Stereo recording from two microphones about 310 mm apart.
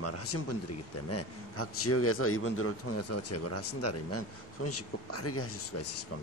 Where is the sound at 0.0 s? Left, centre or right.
Left.